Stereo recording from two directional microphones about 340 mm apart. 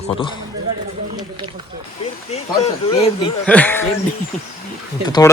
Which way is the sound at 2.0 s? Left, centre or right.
Centre.